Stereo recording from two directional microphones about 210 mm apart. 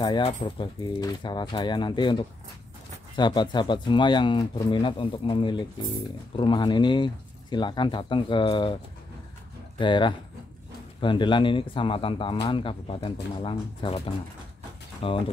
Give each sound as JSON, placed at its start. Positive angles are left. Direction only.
{"t": 0.0, "sound": "speech", "side_deg": 20}
{"t": 9.8, "sound": "speech", "side_deg": 25}